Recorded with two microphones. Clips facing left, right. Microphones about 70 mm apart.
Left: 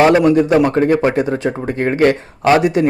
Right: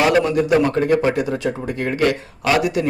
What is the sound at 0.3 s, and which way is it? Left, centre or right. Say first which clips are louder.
Speech: left 5 dB; left.